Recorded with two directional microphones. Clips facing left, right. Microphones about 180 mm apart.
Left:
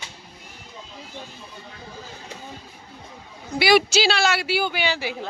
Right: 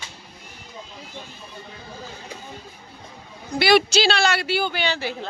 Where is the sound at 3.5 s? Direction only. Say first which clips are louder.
Even; 10° left (ahead or behind).